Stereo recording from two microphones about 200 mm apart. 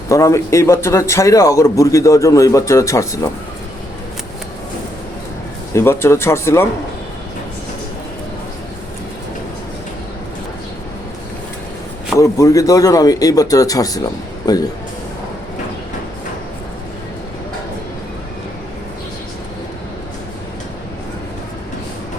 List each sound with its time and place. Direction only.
0.1 s a man's voice: 15° left (ahead or behind)
5.7 s a man's voice: 10° left (ahead or behind)
12.1 s a man's voice: 15° left (ahead or behind)